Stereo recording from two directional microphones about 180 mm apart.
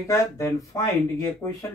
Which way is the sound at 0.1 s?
15° left (ahead or behind).